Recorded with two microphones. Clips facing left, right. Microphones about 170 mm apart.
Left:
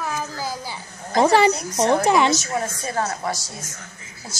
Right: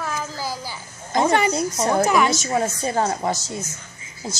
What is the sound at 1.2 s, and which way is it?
A woman's voice, 35° left (ahead or behind).